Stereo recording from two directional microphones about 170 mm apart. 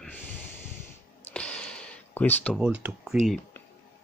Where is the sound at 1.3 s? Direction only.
5° left (ahead or behind).